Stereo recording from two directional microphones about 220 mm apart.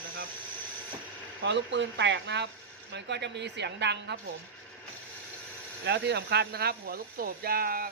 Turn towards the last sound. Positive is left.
turn(degrees=-45)  # may be behind; listen again after turning